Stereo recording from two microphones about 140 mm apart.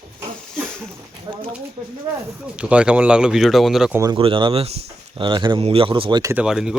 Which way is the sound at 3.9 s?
25° right (ahead or behind).